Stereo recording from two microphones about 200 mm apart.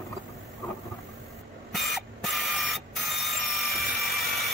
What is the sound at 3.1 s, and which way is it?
Tools, centre (ahead or behind).